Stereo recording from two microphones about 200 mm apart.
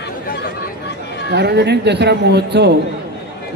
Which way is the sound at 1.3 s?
55° right (ahead or behind).